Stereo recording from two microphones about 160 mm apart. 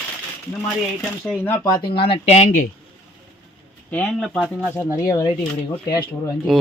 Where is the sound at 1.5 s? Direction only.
25° left (ahead or behind); by 2.5 s 40° left (ahead or behind).